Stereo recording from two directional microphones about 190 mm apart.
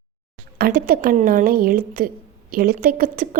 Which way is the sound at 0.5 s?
50° right (ahead or behind).